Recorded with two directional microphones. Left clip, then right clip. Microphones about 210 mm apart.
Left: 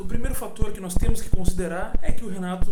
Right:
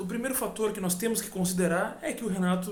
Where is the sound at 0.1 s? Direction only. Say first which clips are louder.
Right 3 dB; centre (ahead or behind).